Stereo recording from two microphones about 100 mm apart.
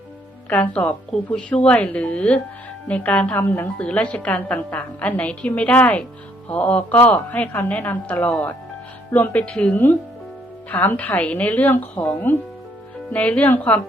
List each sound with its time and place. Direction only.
0.5 s a woman's voice: 15° left (ahead or behind)